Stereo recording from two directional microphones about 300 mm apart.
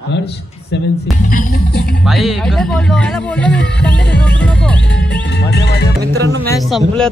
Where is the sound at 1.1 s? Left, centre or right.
Left.